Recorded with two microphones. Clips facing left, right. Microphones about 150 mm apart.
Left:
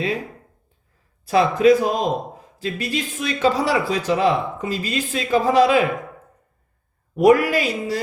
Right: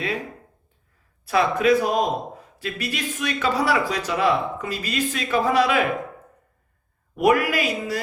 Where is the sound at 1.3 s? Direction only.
25° left (ahead or behind).